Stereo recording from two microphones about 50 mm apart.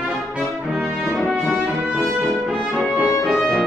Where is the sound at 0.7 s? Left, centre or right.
Right.